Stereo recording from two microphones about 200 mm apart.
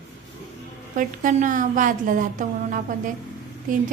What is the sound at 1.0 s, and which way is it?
A woman's voice, 40° right (ahead or behind).